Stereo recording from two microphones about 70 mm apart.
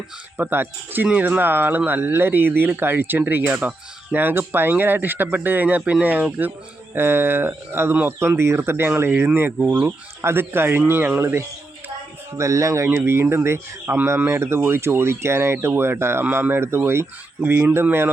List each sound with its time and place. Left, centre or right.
0.3 s speech: right
12.4 s speech: right
12.9 s speech: right